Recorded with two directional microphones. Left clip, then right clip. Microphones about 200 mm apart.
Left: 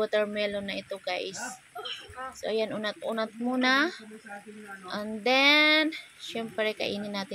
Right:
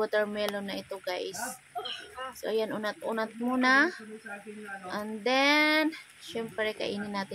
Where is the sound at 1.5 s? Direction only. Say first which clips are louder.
Right 1 dB; 5° right (ahead or behind).